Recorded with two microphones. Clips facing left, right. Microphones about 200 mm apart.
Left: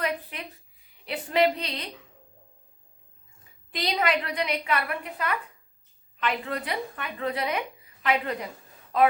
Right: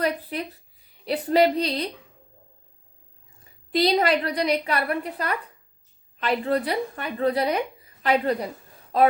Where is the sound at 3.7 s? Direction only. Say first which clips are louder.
Right 6 dB; 35° right (ahead or behind).